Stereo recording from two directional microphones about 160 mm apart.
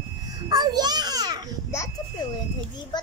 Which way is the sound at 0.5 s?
25° right (ahead or behind).